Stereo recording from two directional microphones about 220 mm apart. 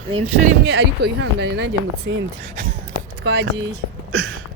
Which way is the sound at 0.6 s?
50° right (ahead or behind).